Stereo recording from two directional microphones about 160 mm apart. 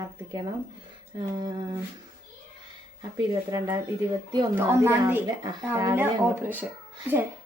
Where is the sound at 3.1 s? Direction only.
20° right (ahead or behind).